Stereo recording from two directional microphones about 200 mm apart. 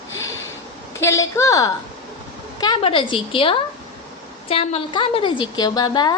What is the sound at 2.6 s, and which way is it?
A woman's voice, 25° left (ahead or behind).